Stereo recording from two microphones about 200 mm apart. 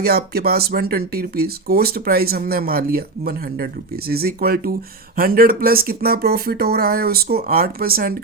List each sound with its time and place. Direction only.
0.0 s speech: 50° right (ahead or behind)